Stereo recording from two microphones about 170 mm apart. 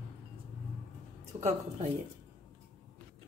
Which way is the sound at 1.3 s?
35° right (ahead or behind).